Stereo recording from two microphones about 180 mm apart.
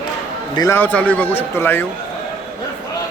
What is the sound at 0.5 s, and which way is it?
A man's voice, 15° left (ahead or behind).